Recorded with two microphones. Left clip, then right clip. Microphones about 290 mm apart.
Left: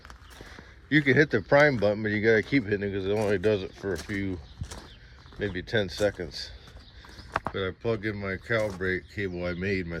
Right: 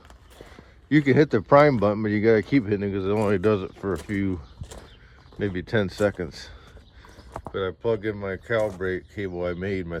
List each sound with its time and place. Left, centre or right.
0.5 s a sound: centre
1.5 s speech: centre
5.4 s speech: centre
7.5 s speech: centre